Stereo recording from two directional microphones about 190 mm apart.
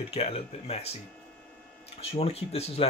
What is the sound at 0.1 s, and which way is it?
Speech, 30° left (ahead or behind).